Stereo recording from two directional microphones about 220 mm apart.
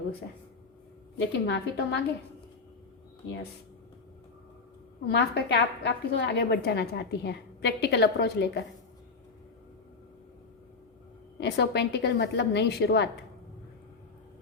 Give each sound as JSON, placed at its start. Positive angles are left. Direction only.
{"t": 1.3, "sound": "a woman's voice", "side_deg": 50}
{"t": 5.1, "sound": "a woman's voice", "side_deg": 50}
{"t": 11.3, "sound": "a woman's voice", "side_deg": 50}